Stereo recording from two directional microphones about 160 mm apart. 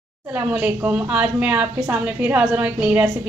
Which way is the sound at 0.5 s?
10° right (ahead or behind).